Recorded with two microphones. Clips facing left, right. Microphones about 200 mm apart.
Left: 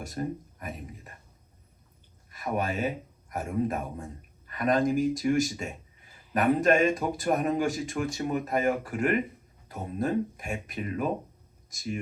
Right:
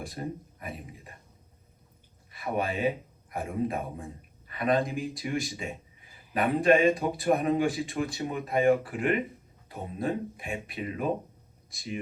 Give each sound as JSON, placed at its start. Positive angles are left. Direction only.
{"t": 0.0, "sound": "speech", "side_deg": 45}
{"t": 2.3, "sound": "a man's voice", "side_deg": 45}